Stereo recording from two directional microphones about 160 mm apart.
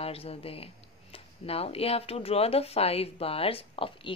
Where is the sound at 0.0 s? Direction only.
40° left (ahead or behind).